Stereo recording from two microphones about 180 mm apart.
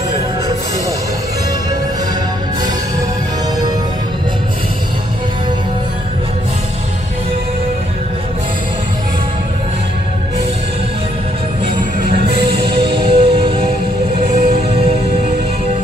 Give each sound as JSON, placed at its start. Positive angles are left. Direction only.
{"t": 12.6, "sound": "music", "side_deg": -30}